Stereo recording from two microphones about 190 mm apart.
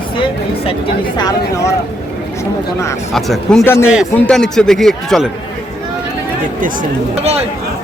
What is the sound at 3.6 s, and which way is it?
Speech, 15° left (ahead or behind).